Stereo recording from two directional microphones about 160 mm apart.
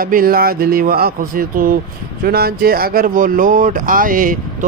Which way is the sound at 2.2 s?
75° right (ahead or behind).